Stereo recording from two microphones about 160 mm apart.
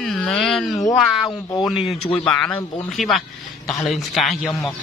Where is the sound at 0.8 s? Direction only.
20° left (ahead or behind).